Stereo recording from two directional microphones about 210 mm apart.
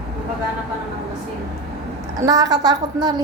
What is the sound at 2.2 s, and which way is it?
A woman's voice, 15° right (ahead or behind).